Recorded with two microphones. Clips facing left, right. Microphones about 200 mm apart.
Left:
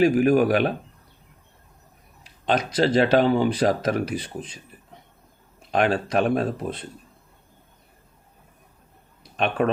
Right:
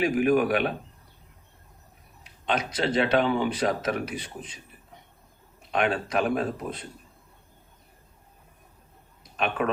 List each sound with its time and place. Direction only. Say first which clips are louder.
0.0 s speech: left 5 dB; 35° left (ahead or behind)
2.5 s speech: left 6 dB; 35° left (ahead or behind)
5.7 s speech: left 4 dB; 35° left (ahead or behind)
9.6 s speech: left 5 dB; 40° left (ahead or behind)